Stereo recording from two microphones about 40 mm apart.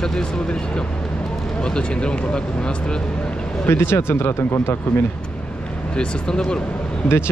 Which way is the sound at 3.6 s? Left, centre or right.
Left.